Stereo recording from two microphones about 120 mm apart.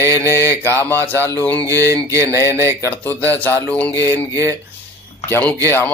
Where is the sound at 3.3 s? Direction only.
15° left (ahead or behind).